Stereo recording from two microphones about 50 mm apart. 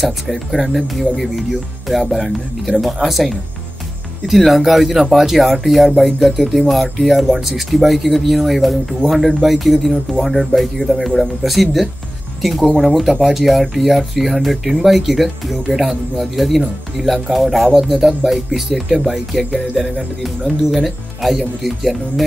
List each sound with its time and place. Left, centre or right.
0.0 s speech: centre